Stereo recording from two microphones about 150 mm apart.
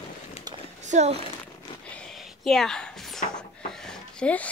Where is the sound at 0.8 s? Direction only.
50° right (ahead or behind).